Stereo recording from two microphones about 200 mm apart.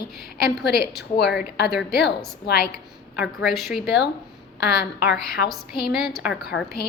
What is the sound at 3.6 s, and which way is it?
Speech, centre (ahead or behind).